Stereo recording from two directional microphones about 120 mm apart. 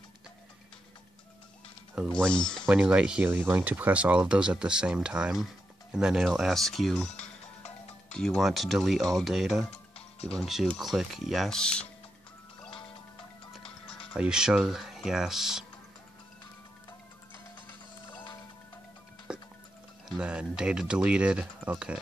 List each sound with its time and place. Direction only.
2.1 s speech: 10° left (ahead or behind)
2.7 s speech: 10° right (ahead or behind); by 11.9 s 10° left (ahead or behind)
12.6 s music: 45° left (ahead or behind)
14.1 s speech: 5° right (ahead or behind)
19.3 s music: 10° right (ahead or behind)
20.1 s speech: 10° right (ahead or behind)